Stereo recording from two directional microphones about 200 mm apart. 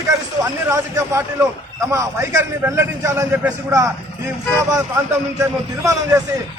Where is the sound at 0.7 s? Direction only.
15° right (ahead or behind).